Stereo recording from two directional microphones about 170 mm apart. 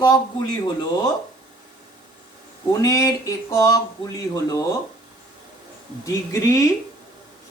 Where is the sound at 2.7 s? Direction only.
20° left (ahead or behind).